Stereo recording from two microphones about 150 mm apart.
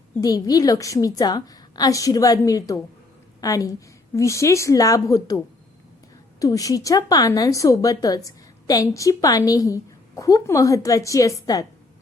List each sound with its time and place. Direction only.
0.2 s a woman's voice: 25° left (ahead or behind)
6.4 s a woman's voice: 25° left (ahead or behind)